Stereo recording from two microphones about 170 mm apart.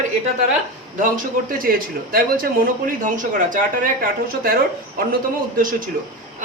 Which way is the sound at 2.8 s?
50° right (ahead or behind).